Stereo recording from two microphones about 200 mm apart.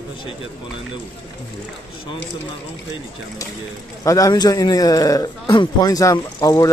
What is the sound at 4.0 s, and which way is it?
A man's voice, 15° left (ahead or behind).